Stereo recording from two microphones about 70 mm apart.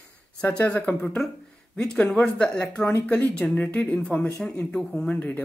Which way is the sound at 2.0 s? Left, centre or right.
Centre.